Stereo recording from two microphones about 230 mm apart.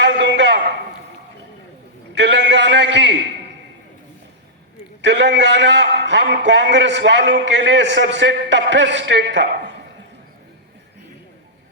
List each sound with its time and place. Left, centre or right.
0.0 s a sound: right
2.1 s a man's voice: right
5.0 s a man's voice: right